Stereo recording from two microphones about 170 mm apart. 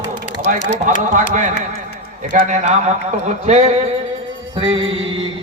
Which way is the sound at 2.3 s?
50° right (ahead or behind).